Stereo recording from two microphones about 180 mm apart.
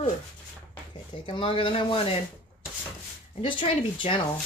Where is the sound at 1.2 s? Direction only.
30° left (ahead or behind).